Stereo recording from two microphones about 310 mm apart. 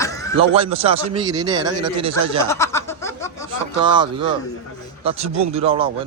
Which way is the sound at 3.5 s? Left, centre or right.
Centre.